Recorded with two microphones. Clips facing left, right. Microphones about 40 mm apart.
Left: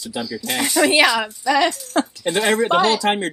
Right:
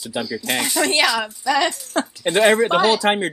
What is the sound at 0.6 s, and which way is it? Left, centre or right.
Speech, centre.